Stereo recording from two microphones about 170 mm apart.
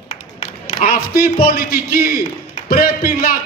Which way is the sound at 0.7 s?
55° left (ahead or behind).